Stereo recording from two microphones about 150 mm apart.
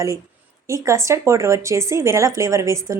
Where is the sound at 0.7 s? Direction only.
20° right (ahead or behind).